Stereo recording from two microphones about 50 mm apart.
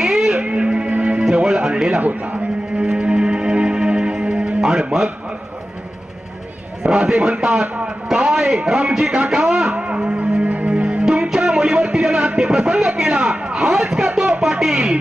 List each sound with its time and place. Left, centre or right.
0.0 s music: centre
2.0 s a man's voice: right
2.8 s music: centre
6.8 s a man's voice: centre
10.4 s music: right
12.4 s a sound: centre
14.4 s speech: centre